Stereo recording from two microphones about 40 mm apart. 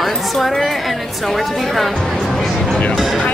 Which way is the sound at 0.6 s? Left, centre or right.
Centre.